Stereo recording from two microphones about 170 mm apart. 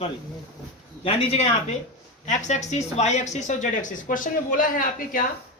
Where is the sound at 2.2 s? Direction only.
45° left (ahead or behind).